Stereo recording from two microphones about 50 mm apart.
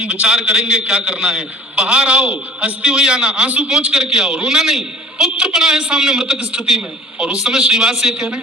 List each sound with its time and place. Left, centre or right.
0.0 s a man's voice: right